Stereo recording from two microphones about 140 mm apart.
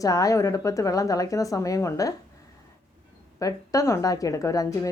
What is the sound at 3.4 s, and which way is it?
Speech, 25° left (ahead or behind).